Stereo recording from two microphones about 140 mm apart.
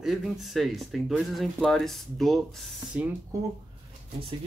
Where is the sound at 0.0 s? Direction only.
Centre (ahead or behind).